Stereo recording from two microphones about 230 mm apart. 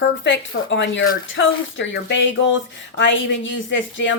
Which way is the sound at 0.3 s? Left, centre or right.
Left.